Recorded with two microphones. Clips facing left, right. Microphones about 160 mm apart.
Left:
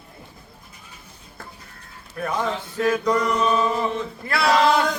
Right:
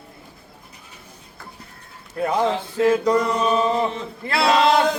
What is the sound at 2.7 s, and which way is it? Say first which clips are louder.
Mantra: right 3 dB; 30° right (ahead or behind).